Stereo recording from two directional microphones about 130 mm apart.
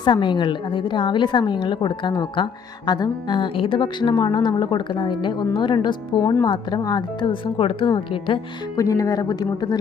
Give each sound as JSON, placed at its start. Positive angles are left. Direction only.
{"t": 0.0, "sound": "a woman's voice", "side_deg": 40}